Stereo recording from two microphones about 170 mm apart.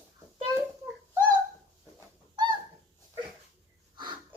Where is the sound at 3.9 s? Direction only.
25° right (ahead or behind).